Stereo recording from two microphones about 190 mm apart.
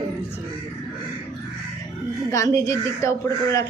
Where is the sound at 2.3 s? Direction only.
15° left (ahead or behind).